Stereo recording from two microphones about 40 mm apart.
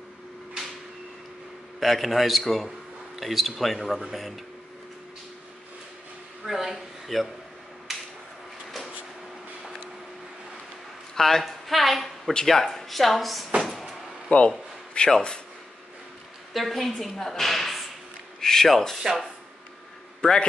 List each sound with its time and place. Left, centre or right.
1.8 s speech: centre
6.4 s speech: centre
7.9 s a sound: centre
11.1 s speech: centre
13.6 s cupboard open or close: centre
14.3 s a man's voice: left
16.5 s speech: centre
20.2 s a man's voice: left